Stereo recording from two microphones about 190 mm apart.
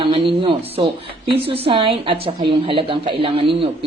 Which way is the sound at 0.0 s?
25° right (ahead or behind).